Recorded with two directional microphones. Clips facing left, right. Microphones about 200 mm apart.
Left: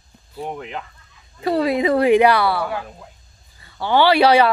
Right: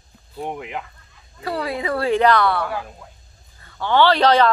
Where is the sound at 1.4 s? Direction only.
20° left (ahead or behind).